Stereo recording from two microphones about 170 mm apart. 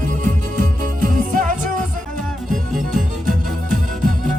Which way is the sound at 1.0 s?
50° right (ahead or behind).